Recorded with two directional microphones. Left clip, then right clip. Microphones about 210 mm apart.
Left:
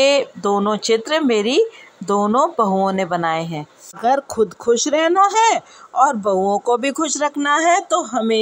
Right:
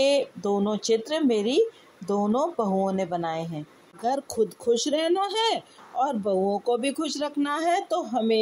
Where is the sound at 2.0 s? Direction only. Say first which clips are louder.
Left 8 dB; 25° left (ahead or behind).